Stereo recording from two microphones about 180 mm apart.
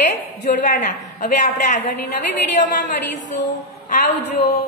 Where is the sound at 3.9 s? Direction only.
45° left (ahead or behind).